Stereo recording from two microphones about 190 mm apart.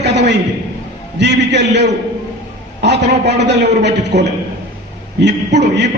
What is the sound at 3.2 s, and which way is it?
A man's voice, 65° right (ahead or behind).